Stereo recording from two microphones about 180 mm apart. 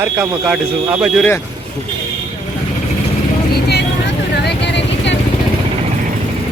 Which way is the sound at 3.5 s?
65° left (ahead or behind).